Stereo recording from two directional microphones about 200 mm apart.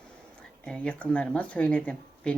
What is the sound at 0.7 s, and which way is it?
Speech, 5° left (ahead or behind).